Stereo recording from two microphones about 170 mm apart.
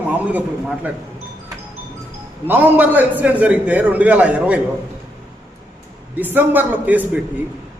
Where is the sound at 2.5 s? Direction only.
10° right (ahead or behind).